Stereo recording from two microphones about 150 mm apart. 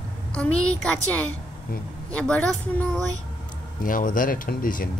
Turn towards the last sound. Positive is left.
turn(degrees=70)  # may be behind; listen again after turning